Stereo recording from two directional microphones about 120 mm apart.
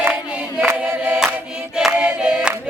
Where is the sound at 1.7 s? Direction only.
5° right (ahead or behind).